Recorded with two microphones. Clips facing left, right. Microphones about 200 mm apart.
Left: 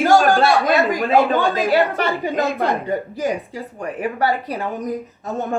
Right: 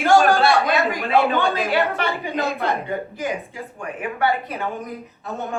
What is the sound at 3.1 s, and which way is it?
Speech, 35° left (ahead or behind).